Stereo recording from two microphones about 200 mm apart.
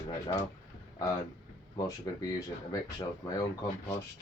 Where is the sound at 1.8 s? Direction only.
20° left (ahead or behind).